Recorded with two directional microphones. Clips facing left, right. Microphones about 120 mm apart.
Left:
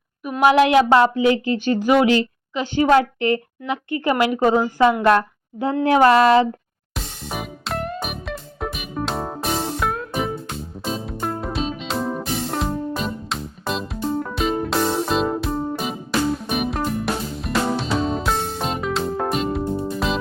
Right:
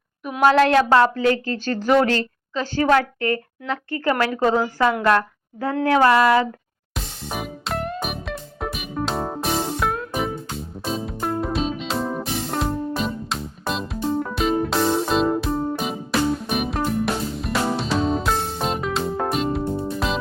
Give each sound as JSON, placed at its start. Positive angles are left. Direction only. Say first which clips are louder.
{"t": 0.4, "sound": "a woman's voice", "louder": "left 1 dB", "side_deg": 15}
{"t": 5.8, "sound": "a sound", "louder": "left 2 dB", "side_deg": 20}
{"t": 6.9, "sound": "music", "louder": "even", "side_deg": 0}